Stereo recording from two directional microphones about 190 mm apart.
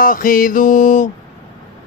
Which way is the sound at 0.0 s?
45° left (ahead or behind).